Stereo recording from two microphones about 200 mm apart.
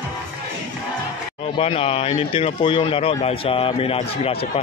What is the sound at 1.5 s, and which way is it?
Speech, 30° left (ahead or behind).